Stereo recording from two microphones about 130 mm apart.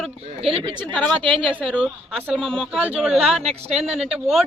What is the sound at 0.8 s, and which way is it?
Speech, 5° left (ahead or behind).